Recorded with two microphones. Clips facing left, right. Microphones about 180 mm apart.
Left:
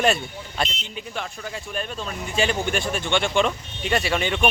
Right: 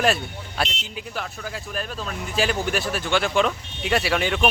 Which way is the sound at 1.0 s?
Centre (ahead or behind).